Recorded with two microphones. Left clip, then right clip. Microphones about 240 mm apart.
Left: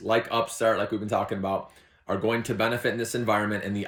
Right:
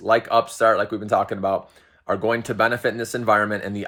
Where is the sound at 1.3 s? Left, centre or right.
Centre.